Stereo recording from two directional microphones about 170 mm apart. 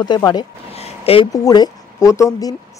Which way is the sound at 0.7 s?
35° left (ahead or behind).